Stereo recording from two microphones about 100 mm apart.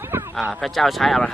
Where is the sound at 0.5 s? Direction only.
Centre (ahead or behind).